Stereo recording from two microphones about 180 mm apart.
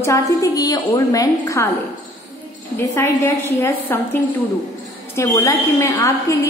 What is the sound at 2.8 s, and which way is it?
A man's voice, 15° left (ahead or behind).